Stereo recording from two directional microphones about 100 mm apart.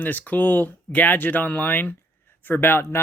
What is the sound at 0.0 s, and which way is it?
Speech, 15° left (ahead or behind).